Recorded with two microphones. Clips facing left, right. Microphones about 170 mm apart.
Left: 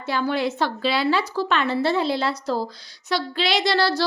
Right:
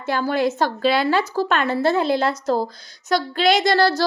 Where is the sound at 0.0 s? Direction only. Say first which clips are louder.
Right 3 dB; 45° right (ahead or behind).